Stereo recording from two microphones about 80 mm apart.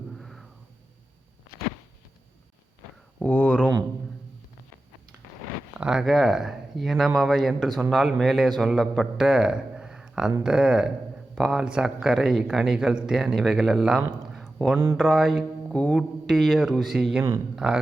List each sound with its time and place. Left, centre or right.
0.2 s a sound: centre
3.2 s speech: left
5.8 s speech: centre
14.3 s a sound: centre
14.9 s speech: centre
15.7 s music: centre
16.2 s speech: centre